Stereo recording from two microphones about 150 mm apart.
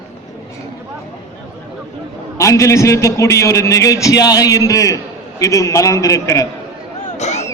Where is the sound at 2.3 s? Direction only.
20° left (ahead or behind).